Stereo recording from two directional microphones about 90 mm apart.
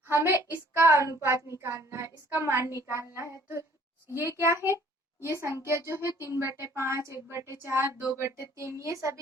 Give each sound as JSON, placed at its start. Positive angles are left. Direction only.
{"t": 0.1, "sound": "speech", "side_deg": -30}
{"t": 2.4, "sound": "child singing", "side_deg": -25}
{"t": 4.1, "sound": "speech", "side_deg": -30}
{"t": 5.6, "sound": "child singing", "side_deg": -30}
{"t": 6.4, "sound": "speech", "side_deg": -30}